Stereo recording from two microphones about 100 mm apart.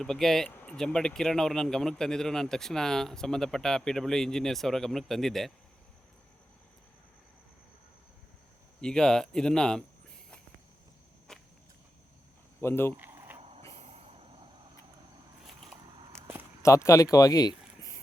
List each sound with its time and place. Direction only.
0.0 s speech: 5° left (ahead or behind)
8.8 s speech: 5° left (ahead or behind)
11.3 s walk: 5° left (ahead or behind)
12.5 s speech: 25° left (ahead or behind)
13.4 s vehicle: 75° right (ahead or behind)
16.1 s a sound: 25° right (ahead or behind)
16.6 s speech: 30° left (ahead or behind)